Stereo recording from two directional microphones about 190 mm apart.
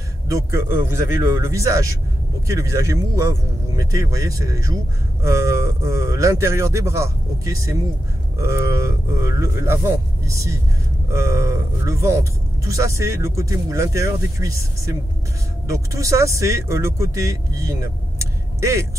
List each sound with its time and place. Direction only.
0.3 s speech: 15° right (ahead or behind)
8.4 s speech: 15° right (ahead or behind)